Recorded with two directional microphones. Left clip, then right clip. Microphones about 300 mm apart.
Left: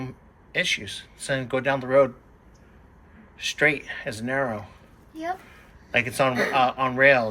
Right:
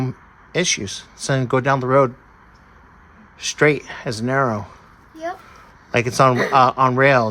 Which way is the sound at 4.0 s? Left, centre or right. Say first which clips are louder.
Right 7 dB; right.